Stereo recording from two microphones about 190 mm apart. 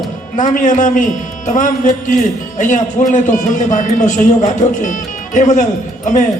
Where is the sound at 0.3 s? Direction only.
40° left (ahead or behind).